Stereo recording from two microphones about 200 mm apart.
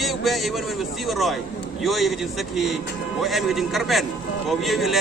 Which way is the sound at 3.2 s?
Centre (ahead or behind).